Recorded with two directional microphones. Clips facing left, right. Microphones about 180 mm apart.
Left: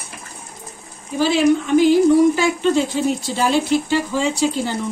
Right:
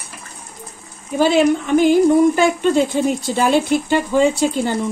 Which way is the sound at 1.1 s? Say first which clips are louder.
Right 1 dB; 55° right (ahead or behind).